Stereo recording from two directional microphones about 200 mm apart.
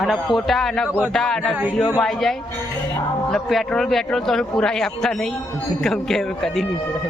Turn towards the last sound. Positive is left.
turn(degrees=0)  # may be behind; listen again after turning